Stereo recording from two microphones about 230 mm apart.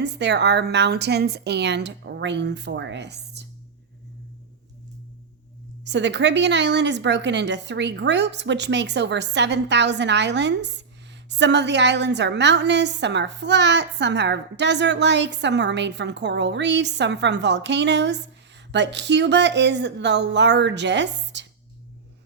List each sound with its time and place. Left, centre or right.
0.0 s a woman's voice: right
5.8 s a woman's voice: right